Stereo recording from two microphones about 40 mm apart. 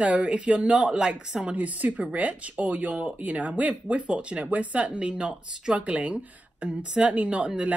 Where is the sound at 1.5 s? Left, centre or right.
Right.